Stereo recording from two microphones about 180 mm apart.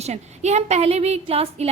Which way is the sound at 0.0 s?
40° right (ahead or behind).